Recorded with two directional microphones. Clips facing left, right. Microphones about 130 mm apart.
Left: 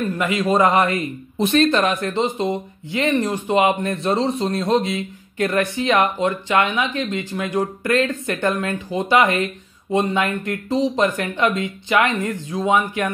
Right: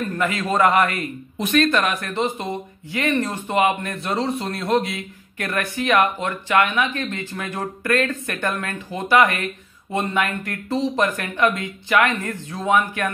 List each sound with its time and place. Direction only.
0.2 s a man's voice: 15° left (ahead or behind)